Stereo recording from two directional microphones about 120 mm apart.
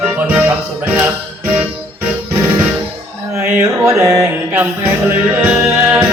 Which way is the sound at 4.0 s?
20° right (ahead or behind).